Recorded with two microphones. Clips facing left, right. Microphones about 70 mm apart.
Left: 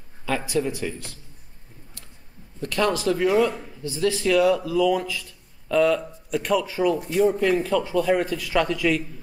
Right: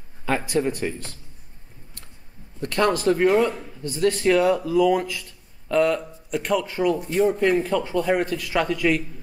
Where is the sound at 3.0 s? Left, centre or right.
Right.